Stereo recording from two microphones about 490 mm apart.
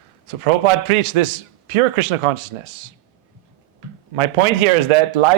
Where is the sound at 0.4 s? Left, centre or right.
Right.